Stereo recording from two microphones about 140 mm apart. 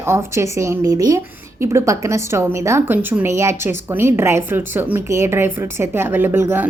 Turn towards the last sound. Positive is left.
turn(degrees=-15)  # may be behind; listen again after turning